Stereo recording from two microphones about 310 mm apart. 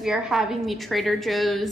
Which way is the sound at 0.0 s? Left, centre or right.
Centre.